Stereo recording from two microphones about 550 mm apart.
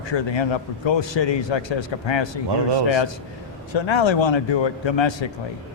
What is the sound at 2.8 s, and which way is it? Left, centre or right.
Speech, left.